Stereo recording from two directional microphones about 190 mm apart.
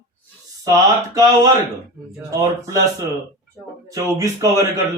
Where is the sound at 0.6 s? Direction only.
20° right (ahead or behind).